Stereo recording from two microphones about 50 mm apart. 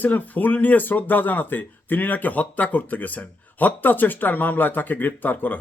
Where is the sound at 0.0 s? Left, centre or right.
Left.